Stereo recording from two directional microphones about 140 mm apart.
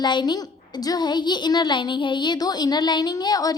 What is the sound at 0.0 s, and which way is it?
A woman's voice, 30° left (ahead or behind).